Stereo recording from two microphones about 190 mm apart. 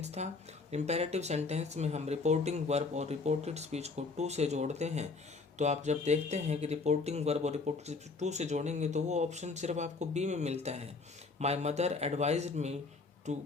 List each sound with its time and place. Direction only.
0.0 s speech: 35° right (ahead or behind)